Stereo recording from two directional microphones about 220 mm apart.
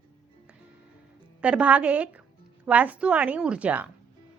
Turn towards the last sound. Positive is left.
turn(degrees=-5)  # may be behind; listen again after turning